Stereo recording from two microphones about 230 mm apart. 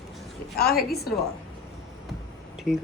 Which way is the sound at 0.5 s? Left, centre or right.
Left.